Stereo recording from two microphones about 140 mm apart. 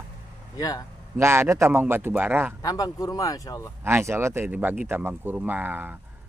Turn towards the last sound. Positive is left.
turn(degrees=-15)  # may be behind; listen again after turning